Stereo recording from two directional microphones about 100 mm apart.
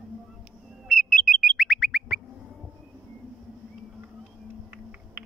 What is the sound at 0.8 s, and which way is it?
Bird, 5° left (ahead or behind).